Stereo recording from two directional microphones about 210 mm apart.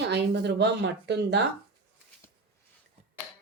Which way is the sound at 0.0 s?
55° right (ahead or behind).